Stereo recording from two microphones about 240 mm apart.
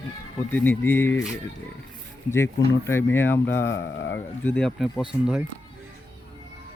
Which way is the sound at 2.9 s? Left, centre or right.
Centre.